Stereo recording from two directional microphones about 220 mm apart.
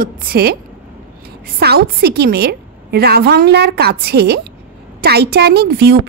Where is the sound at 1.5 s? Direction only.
45° right (ahead or behind).